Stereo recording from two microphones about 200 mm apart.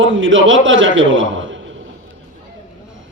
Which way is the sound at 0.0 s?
70° right (ahead or behind).